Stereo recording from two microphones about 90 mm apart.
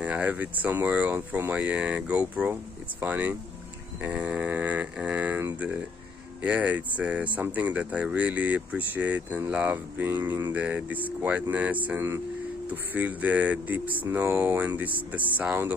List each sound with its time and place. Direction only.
0.0 s speech: 15° right (ahead or behind)
6.4 s speech: 15° right (ahead or behind)